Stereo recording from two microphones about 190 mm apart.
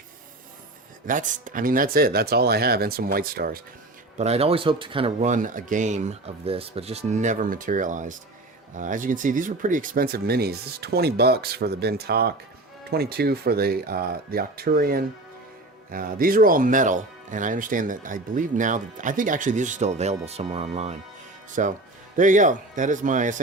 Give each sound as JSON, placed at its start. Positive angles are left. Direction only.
{"t": 1.0, "sound": "speech", "side_deg": -45}
{"t": 4.2, "sound": "speech", "side_deg": -35}
{"t": 21.6, "sound": "speech", "side_deg": -45}